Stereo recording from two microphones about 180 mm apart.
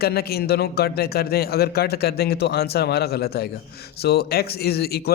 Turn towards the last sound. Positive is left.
turn(degrees=60)  # may be behind; listen again after turning